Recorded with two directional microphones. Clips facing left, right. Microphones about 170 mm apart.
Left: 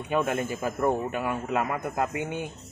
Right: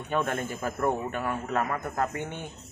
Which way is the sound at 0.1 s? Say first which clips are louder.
Left 2 dB; 10° left (ahead or behind).